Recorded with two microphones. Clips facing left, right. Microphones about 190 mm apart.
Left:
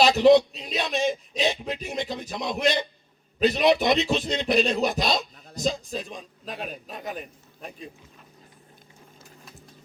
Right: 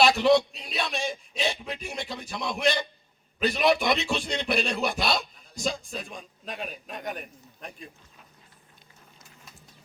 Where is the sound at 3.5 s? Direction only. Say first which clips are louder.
Left 3 dB; 20° left (ahead or behind).